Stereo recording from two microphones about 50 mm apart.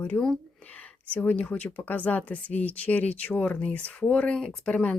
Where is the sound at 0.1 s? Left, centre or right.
Left.